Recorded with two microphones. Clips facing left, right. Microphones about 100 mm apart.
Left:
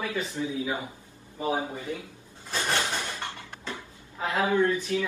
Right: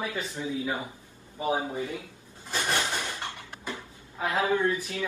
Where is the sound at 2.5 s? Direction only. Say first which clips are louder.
Even; 20° right (ahead or behind).